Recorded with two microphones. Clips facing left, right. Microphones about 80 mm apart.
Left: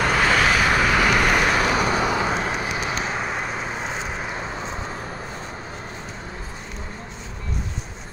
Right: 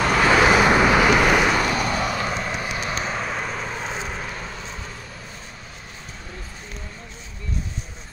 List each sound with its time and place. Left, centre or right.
0.0 s vehicle: centre
0.3 s vehicle: centre
0.6 s vehicle: right
0.8 s vehicle: centre
1.7 s vehicle: centre
4.2 s vehicle: left